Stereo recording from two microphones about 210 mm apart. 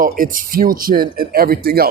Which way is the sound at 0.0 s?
40° right (ahead or behind).